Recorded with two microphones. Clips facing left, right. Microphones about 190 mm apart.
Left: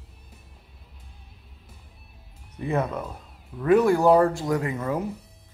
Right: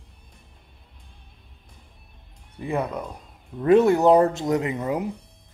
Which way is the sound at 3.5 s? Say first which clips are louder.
Right 2 dB; 25° right (ahead or behind).